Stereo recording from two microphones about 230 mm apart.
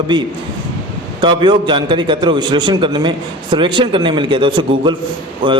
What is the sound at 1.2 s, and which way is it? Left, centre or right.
A man's voice, right.